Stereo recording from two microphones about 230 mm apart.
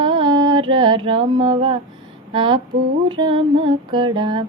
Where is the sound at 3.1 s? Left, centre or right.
Right.